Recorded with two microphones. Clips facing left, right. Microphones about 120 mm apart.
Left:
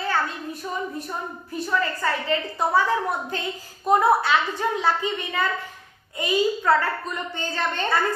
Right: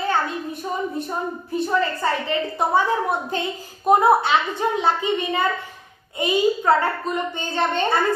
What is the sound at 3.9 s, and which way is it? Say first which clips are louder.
A woman's voice: right 3 dB; 20° right (ahead or behind).